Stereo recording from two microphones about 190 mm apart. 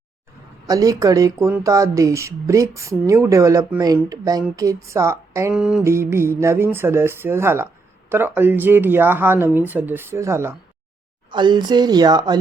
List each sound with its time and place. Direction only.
0.7 s speech: 20° right (ahead or behind)
5.5 s music: 5° right (ahead or behind)
5.8 s speech: 15° right (ahead or behind)
11.3 s speech: 25° right (ahead or behind)